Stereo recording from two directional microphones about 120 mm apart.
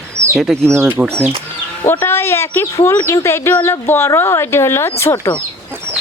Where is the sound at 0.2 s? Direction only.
25° right (ahead or behind).